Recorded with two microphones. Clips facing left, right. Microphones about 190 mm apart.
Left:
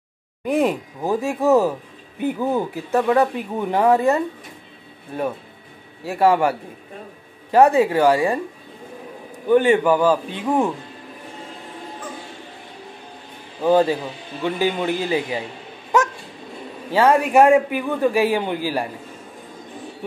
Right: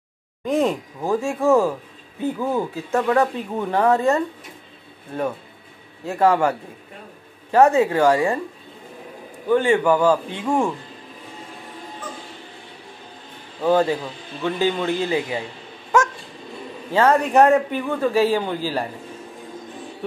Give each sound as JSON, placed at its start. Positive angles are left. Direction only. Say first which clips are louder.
{"t": 0.5, "sound": "a man's voice", "louder": "left 1 dB", "side_deg": 15}
{"t": 6.0, "sound": "a man's voice", "louder": "left 1 dB", "side_deg": 15}
{"t": 7.5, "sound": "a man's voice", "louder": "left 1 dB", "side_deg": 15}
{"t": 9.5, "sound": "a man's voice", "louder": "left 2 dB", "side_deg": 15}
{"t": 13.6, "sound": "a man's voice", "louder": "left 2 dB", "side_deg": 15}
{"t": 16.9, "sound": "a man's voice", "louder": "left 1 dB", "side_deg": 10}